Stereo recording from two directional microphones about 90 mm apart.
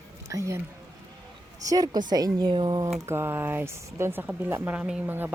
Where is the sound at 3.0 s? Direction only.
25° right (ahead or behind).